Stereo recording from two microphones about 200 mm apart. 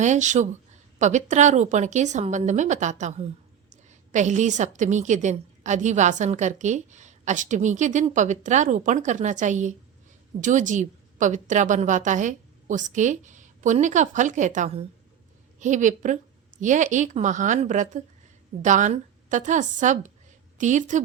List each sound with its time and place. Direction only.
0.0 s a woman's voice: 35° right (ahead or behind)